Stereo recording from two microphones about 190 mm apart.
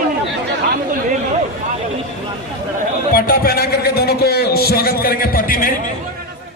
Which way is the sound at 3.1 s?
50° left (ahead or behind).